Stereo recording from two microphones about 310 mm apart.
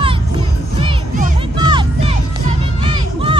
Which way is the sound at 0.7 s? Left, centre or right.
Right.